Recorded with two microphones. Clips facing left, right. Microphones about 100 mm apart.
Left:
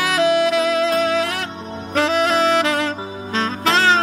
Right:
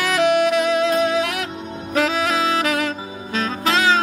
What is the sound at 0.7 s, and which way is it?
Music, 35° left (ahead or behind).